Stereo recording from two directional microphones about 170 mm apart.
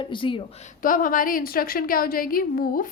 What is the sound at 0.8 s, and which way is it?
A woman's voice, 55° left (ahead or behind).